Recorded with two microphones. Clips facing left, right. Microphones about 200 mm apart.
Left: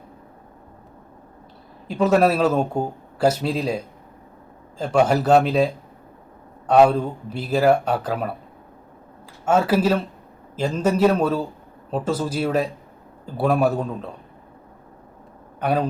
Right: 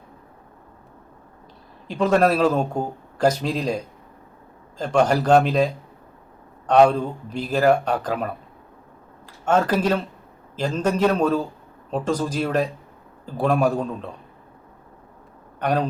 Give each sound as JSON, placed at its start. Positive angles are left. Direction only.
{"t": 1.9, "sound": "speech", "side_deg": 5}
{"t": 6.7, "sound": "speech", "side_deg": 5}
{"t": 9.5, "sound": "speech", "side_deg": 10}
{"t": 15.6, "sound": "speech", "side_deg": 5}